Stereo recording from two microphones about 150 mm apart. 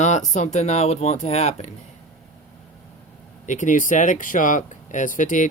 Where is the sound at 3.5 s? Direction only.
55° left (ahead or behind).